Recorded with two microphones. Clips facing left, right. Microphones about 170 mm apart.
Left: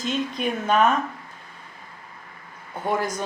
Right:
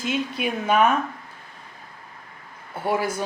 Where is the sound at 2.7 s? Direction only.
5° right (ahead or behind).